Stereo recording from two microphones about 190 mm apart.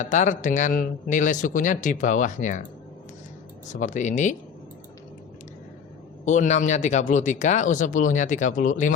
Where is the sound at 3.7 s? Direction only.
40° left (ahead or behind).